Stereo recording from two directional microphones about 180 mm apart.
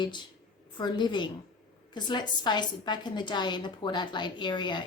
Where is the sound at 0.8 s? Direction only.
25° left (ahead or behind).